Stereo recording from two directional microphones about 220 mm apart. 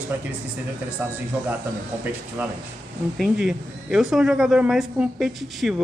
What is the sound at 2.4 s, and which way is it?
Speech, 10° right (ahead or behind).